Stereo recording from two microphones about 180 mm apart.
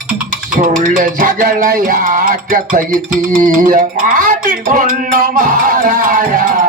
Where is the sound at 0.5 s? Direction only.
50° right (ahead or behind).